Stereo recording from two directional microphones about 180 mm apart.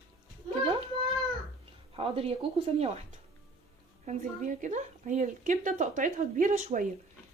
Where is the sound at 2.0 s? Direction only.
30° right (ahead or behind).